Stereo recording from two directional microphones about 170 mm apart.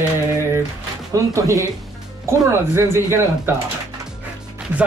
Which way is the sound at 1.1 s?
20° right (ahead or behind).